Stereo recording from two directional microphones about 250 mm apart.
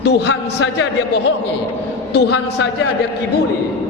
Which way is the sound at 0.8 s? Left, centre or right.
Left.